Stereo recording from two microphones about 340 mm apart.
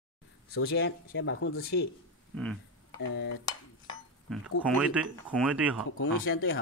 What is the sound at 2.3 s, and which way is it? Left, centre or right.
Speech, centre.